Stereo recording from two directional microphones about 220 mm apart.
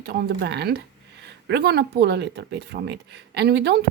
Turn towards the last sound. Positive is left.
turn(degrees=-50)  # may be behind; listen again after turning